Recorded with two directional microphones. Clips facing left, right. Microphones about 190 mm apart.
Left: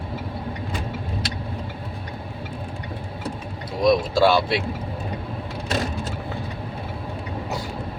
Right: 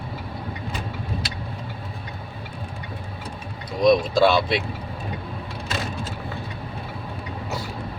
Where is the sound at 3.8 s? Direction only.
20° right (ahead or behind).